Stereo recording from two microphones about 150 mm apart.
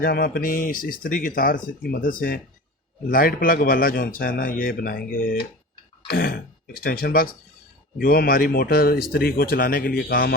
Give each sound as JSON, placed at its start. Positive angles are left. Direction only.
{"t": 0.0, "sound": "speech", "side_deg": 90}
{"t": 6.1, "sound": "a man's voice", "side_deg": 90}